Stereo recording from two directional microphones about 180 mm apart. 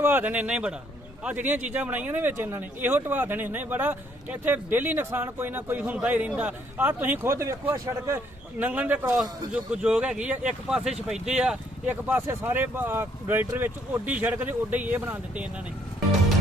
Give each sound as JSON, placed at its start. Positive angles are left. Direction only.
{"t": 0.0, "sound": "speech", "side_deg": -10}